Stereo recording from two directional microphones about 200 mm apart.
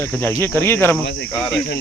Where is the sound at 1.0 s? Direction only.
55° left (ahead or behind).